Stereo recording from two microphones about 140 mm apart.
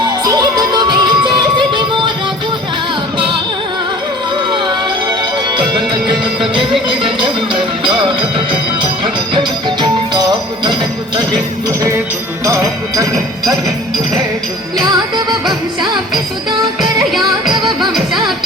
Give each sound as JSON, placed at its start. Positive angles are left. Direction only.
{"t": 0.0, "sound": "music", "side_deg": -30}
{"t": 3.2, "sound": "music", "side_deg": -35}
{"t": 4.5, "sound": "music", "side_deg": -30}
{"t": 9.3, "sound": "music", "side_deg": -35}
{"t": 11.8, "sound": "music", "side_deg": -20}
{"t": 12.5, "sound": "jingle bell", "side_deg": -20}
{"t": 13.1, "sound": "music", "side_deg": 0}
{"t": 14.8, "sound": "music", "side_deg": -30}
{"t": 17.7, "sound": "music", "side_deg": 0}